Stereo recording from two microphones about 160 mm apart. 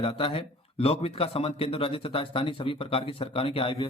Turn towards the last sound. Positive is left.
turn(degrees=35)  # may be behind; listen again after turning